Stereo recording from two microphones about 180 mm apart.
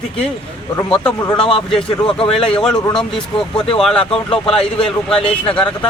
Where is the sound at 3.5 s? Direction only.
30° left (ahead or behind).